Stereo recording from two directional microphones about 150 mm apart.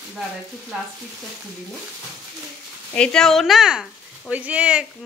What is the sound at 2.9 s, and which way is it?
A woman's voice, 5° left (ahead or behind).